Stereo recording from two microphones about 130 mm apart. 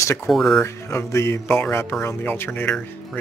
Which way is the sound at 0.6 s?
20° left (ahead or behind).